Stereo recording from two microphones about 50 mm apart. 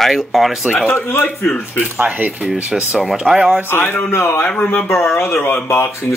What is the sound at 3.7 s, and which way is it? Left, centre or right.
Speech, left.